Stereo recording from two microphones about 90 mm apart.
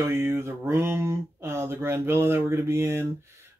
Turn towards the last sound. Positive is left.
turn(degrees=-30)  # may be behind; listen again after turning